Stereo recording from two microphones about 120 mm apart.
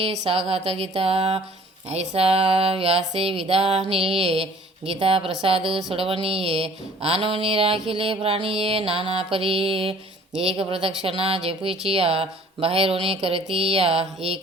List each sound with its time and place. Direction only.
0.0 s speech: 60° right (ahead or behind)
1.9 s mantra: 60° right (ahead or behind)